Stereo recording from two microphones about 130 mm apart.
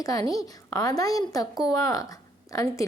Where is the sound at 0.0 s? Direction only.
30° left (ahead or behind).